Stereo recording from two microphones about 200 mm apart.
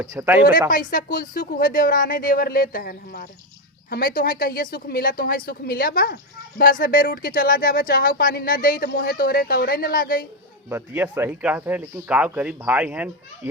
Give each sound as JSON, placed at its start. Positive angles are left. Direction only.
{"t": 0.0, "sound": "speech", "side_deg": -15}
{"t": 0.7, "sound": "speech", "side_deg": 45}
{"t": 10.7, "sound": "speech", "side_deg": -10}